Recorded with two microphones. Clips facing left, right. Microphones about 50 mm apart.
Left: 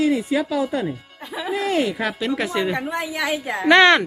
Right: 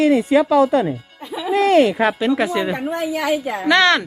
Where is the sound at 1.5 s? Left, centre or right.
Right.